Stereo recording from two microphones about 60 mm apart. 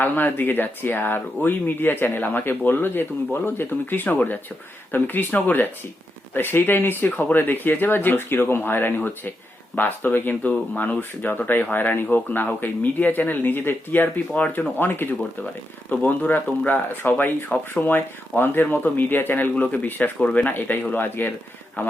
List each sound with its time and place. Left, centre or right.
0.0 s speech: left
14.8 s speech: left
15.9 s speech: left